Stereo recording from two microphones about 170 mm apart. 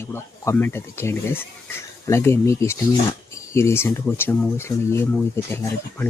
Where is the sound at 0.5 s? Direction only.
15° left (ahead or behind).